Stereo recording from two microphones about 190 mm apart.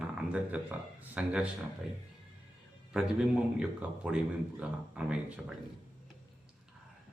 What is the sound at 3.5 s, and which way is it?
Speech, 5° right (ahead or behind).